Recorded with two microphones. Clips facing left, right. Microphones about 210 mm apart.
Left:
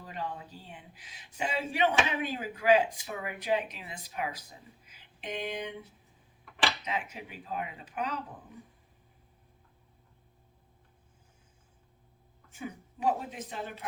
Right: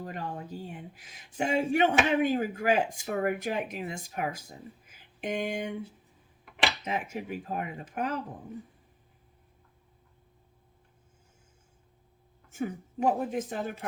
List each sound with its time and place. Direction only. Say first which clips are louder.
0.0 s speech: right 2 dB; 45° right (ahead or behind)
6.8 s speech: right 4 dB; 45° right (ahead or behind)
12.5 s speech: right 7 dB; 45° right (ahead or behind)